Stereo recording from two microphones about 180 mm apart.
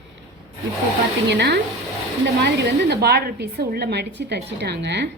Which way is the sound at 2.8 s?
65° right (ahead or behind).